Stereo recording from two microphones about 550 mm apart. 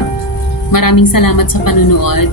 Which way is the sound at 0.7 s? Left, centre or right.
Left.